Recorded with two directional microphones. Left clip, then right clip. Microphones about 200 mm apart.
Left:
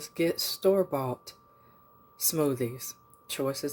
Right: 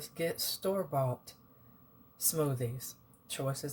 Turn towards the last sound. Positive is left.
turn(degrees=40)  # may be behind; listen again after turning